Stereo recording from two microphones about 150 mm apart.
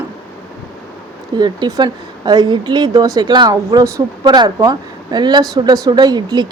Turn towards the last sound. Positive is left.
turn(degrees=-30)  # may be behind; listen again after turning